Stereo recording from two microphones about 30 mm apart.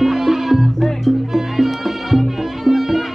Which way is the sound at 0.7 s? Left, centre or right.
Centre.